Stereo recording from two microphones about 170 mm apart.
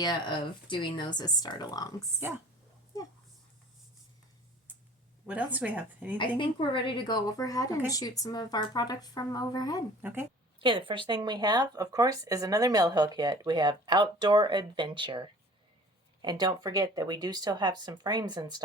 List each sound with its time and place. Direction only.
0.0 s speech: 25° left (ahead or behind)
5.2 s a woman's voice: 10° right (ahead or behind)
6.1 s speech: 30° left (ahead or behind)
10.0 s a woman's voice: 10° right (ahead or behind)
10.6 s speech: 30° right (ahead or behind)